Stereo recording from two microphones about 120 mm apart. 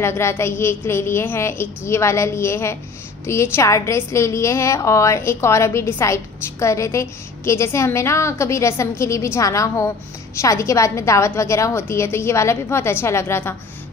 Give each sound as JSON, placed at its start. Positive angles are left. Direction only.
{"t": 0.0, "sound": "a woman's voice", "side_deg": 20}